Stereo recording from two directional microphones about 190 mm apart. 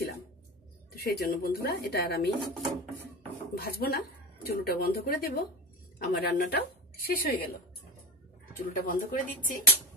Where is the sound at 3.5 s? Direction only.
55° left (ahead or behind).